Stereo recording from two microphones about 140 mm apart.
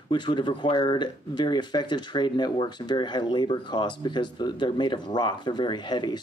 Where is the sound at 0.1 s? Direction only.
35° left (ahead or behind).